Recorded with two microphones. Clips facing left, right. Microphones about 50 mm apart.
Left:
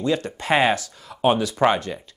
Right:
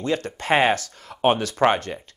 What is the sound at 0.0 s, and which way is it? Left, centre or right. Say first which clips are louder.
Speech: left 2 dB; right.